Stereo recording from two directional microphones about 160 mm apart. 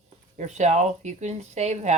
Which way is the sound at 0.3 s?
45° right (ahead or behind).